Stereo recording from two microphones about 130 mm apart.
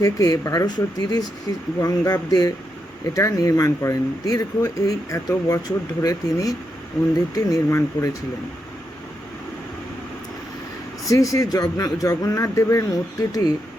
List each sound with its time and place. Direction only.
0.0 s speech: 25° left (ahead or behind)
11.1 s speech: 25° left (ahead or behind)